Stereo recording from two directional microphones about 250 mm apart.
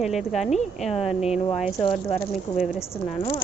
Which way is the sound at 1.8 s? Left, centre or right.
Left.